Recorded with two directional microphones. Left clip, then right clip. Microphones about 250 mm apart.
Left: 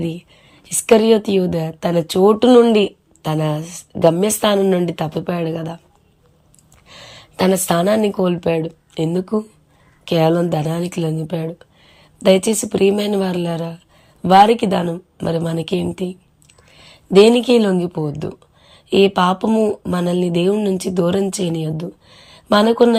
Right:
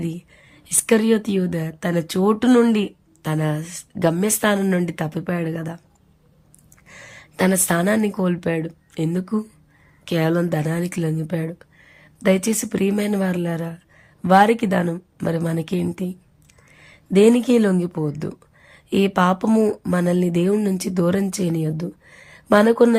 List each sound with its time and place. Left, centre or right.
0.0 s a woman's voice: centre
6.8 s a woman's voice: centre